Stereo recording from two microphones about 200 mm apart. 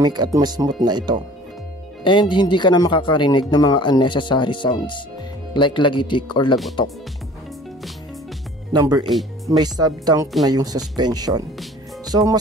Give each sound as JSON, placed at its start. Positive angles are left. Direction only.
{"t": 0.0, "sound": "speech", "side_deg": -20}
{"t": 2.0, "sound": "speech", "side_deg": 25}
{"t": 8.7, "sound": "speech", "side_deg": -20}